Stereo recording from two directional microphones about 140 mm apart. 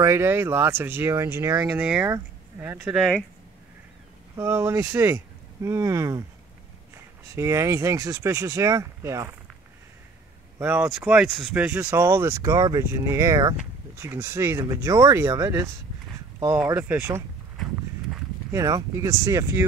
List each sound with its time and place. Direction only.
0.0 s speech: 20° right (ahead or behind)
2.0 s speech: 20° right (ahead or behind)
2.8 s speech: 5° right (ahead or behind)
4.4 s speech: 15° right (ahead or behind)
7.3 s speech: 20° right (ahead or behind)
10.6 s speech: 15° right (ahead or behind)
11.6 s speech: 15° right (ahead or behind)
16.7 s speech: 10° right (ahead or behind)
18.5 s speech: 25° right (ahead or behind)